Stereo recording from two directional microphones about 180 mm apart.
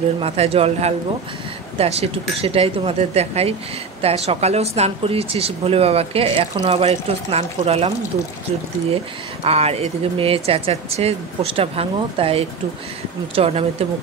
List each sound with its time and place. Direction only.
0.2 s speech: 35° right (ahead or behind)
9.4 s speech: 35° right (ahead or behind)